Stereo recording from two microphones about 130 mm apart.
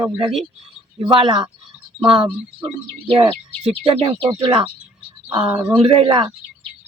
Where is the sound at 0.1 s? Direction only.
5° right (ahead or behind).